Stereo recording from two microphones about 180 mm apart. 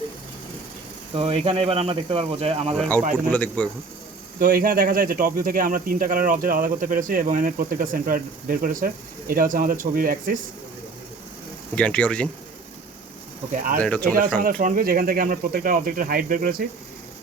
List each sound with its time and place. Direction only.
1.1 s speech: 35° right (ahead or behind)
2.7 s a man's voice: 5° left (ahead or behind)
4.4 s speech: 50° right (ahead or behind)
11.7 s speech: 5° left (ahead or behind)
13.5 s speech: 45° right (ahead or behind)
13.8 s a man's voice: 5° left (ahead or behind)
14.4 s speech: 50° right (ahead or behind)